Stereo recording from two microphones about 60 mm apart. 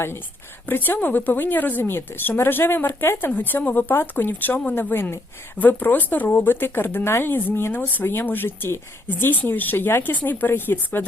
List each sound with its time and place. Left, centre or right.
0.7 s speech: left